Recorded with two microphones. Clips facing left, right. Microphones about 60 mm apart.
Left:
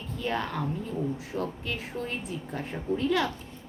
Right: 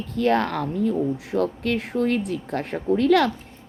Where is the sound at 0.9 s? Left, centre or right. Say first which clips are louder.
Right 8 dB; right.